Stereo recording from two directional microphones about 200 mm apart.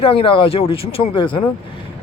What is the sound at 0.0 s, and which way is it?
Speech, 25° left (ahead or behind).